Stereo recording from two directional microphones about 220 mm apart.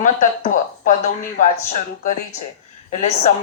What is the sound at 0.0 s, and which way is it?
Speech, 35° left (ahead or behind).